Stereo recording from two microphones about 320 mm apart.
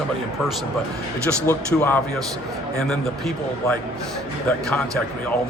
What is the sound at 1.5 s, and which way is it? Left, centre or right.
Speech, centre.